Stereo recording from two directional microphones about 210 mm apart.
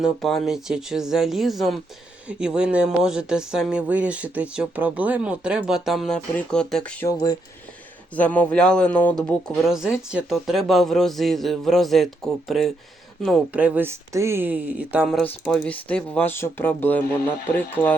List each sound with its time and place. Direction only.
0.0 s speech: centre (ahead or behind)
7.1 s speech: 15° left (ahead or behind)